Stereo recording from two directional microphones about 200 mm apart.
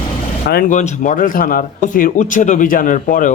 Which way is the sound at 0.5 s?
40° left (ahead or behind).